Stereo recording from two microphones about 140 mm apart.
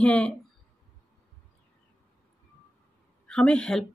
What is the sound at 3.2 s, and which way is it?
Speech, 5° left (ahead or behind).